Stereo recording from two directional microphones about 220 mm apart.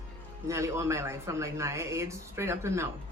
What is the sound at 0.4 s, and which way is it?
Speech, 15° right (ahead or behind).